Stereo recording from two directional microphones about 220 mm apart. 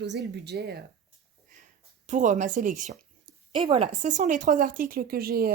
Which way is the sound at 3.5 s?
25° right (ahead or behind).